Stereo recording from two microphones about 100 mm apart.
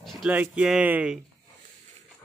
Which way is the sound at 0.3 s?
10° right (ahead or behind).